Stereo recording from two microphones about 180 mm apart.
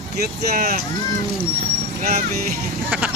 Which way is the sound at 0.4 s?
60° right (ahead or behind).